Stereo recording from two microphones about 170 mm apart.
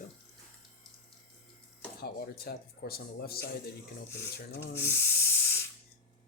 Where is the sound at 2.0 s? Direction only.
65° left (ahead or behind).